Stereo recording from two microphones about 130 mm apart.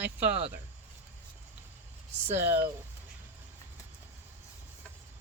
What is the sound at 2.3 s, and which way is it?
Speech, 15° right (ahead or behind).